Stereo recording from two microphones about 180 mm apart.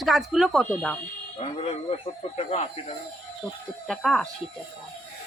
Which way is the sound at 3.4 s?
Centre (ahead or behind).